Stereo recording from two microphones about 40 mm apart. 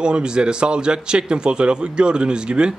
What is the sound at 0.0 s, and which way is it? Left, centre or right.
Speech, right.